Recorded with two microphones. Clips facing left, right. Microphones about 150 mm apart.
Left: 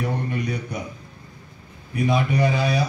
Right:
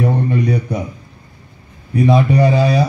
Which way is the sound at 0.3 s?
35° right (ahead or behind).